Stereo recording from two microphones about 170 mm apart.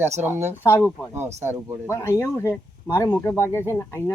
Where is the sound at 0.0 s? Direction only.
10° right (ahead or behind).